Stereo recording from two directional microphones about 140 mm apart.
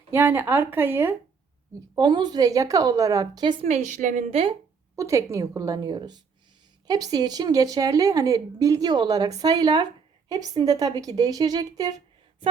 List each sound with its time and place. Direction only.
0.1 s a woman's voice: 15° right (ahead or behind)
2.0 s a woman's voice: 30° right (ahead or behind)
3.6 s a woman's voice: 55° right (ahead or behind)
4.3 s speech: 45° right (ahead or behind)
4.9 s a woman's voice: 20° right (ahead or behind)